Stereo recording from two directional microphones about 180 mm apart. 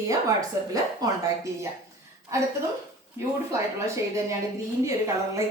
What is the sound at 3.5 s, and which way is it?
Speech, 15° right (ahead or behind).